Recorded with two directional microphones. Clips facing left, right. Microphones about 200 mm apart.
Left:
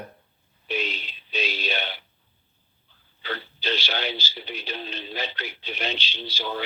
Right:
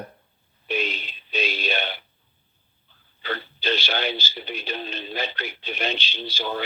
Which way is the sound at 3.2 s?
50° right (ahead or behind).